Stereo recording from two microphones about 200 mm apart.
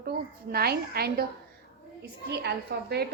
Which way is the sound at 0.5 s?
50° right (ahead or behind).